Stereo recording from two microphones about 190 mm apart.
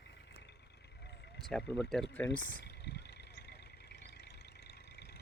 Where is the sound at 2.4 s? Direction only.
60° left (ahead or behind).